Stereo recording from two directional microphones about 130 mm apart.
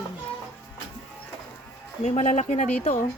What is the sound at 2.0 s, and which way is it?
Speech, 65° left (ahead or behind).